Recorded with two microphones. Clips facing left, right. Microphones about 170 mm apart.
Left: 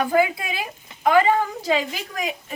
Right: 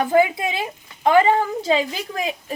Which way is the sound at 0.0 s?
20° right (ahead or behind).